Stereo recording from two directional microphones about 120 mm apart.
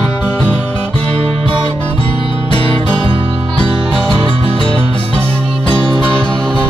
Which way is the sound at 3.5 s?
10° left (ahead or behind).